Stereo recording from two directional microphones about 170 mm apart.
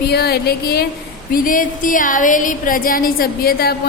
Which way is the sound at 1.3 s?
55° left (ahead or behind).